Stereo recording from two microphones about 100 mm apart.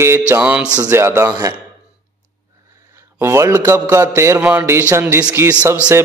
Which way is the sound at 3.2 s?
25° right (ahead or behind).